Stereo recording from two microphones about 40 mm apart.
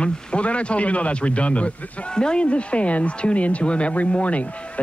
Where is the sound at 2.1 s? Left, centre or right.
Left.